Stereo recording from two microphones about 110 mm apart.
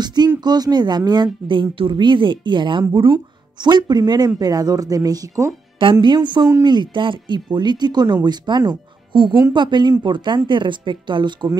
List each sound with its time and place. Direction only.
0.0 s speech: 40° right (ahead or behind)
3.6 s speech: 40° right (ahead or behind)
5.8 s speech: 45° right (ahead or behind)